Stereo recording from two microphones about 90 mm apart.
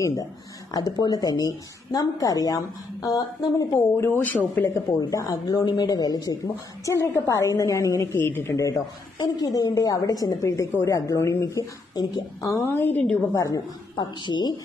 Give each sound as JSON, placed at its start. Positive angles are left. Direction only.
{"t": 0.0, "sound": "speech", "side_deg": 45}
{"t": 3.9, "sound": "a woman's voice", "side_deg": 25}
{"t": 4.7, "sound": "a woman's voice", "side_deg": 35}
{"t": 6.9, "sound": "a woman's voice", "side_deg": 30}
{"t": 8.2, "sound": "a woman's voice", "side_deg": 25}
{"t": 8.5, "sound": "a woman's voice", "side_deg": 40}
{"t": 11.9, "sound": "a woman's voice", "side_deg": 50}
{"t": 12.4, "sound": "a woman's voice", "side_deg": 30}
{"t": 13.9, "sound": "speech", "side_deg": 55}